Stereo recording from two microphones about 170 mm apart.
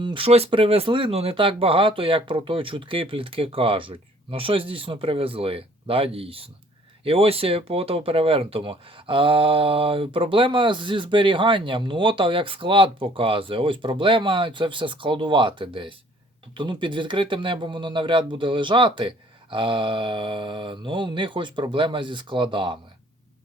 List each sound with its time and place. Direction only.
0.0 s speech: 30° right (ahead or behind)